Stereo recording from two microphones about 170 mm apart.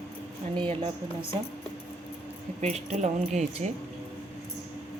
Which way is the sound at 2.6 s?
40° right (ahead or behind).